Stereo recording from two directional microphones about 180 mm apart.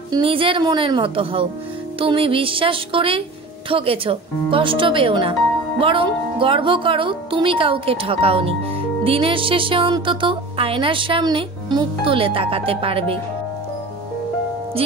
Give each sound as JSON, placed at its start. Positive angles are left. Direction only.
{"t": 0.1, "sound": "speech", "side_deg": -30}